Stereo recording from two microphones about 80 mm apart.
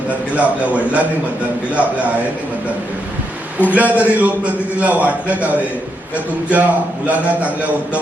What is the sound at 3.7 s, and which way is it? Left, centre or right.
A man's voice, centre.